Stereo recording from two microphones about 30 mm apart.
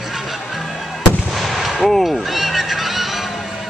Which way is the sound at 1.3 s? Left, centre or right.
Centre.